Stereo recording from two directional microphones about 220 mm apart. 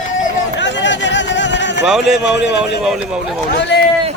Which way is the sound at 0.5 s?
55° left (ahead or behind).